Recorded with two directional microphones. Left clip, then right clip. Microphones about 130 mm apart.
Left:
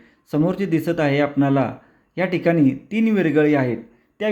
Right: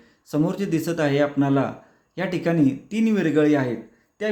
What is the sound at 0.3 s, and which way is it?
Speech, 20° left (ahead or behind).